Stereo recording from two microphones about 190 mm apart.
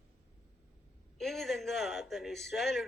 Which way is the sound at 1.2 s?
Centre (ahead or behind).